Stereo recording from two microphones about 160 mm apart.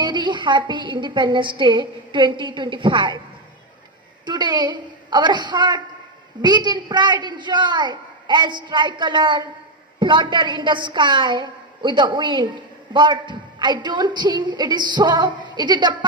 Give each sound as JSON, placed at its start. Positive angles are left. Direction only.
{"t": 0.0, "sound": "a woman's voice", "side_deg": -30}
{"t": 4.3, "sound": "a woman's voice", "side_deg": -25}